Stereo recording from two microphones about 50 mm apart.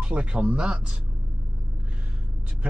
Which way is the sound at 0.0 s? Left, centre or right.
Right.